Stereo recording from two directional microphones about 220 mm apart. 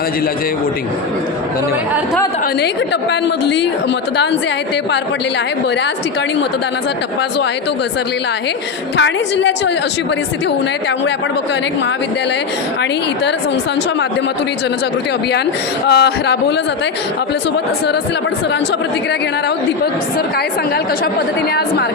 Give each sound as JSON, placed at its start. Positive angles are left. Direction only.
{"t": 2.6, "sound": "a woman's voice", "side_deg": 50}
{"t": 9.0, "sound": "a woman's voice", "side_deg": 55}
{"t": 15.9, "sound": "a woman's voice", "side_deg": 50}